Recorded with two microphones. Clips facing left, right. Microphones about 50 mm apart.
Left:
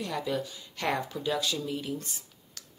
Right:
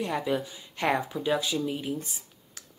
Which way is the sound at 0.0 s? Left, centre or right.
Right.